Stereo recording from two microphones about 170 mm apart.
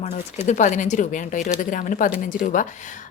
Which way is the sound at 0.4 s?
45° left (ahead or behind).